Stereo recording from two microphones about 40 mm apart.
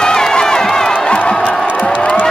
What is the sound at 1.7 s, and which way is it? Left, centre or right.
Crowd, left.